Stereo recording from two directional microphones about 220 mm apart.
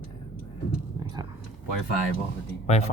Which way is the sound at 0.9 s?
20° right (ahead or behind).